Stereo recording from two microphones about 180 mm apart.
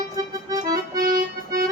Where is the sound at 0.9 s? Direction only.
50° right (ahead or behind).